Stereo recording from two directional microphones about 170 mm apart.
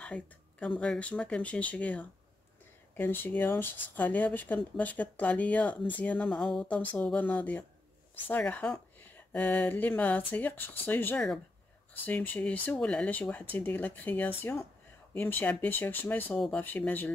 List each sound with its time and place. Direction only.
0.0 s speech: 5° left (ahead or behind)